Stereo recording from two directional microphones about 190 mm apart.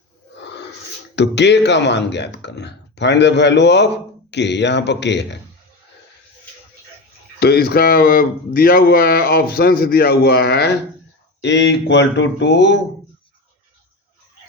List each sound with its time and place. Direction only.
1.1 s speech: 65° left (ahead or behind)
7.3 s speech: 60° left (ahead or behind)